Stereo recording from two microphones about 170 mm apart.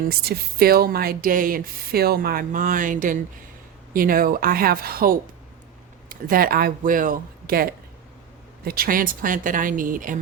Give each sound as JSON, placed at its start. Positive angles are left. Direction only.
{"t": 0.1, "sound": "speech", "side_deg": -65}